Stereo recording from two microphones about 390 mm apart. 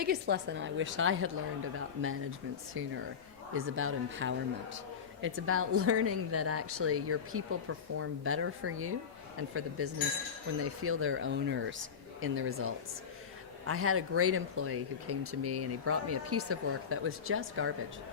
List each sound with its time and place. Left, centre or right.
0.0 s a woman's voice: right